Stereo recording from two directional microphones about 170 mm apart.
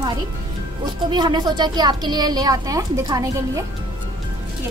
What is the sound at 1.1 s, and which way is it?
A woman's voice, 25° right (ahead or behind).